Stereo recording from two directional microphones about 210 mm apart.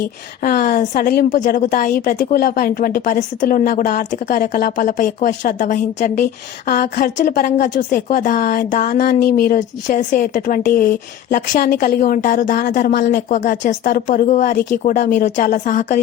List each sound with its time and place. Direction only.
0.4 s speech: 45° left (ahead or behind)
13.4 s speech: 35° left (ahead or behind)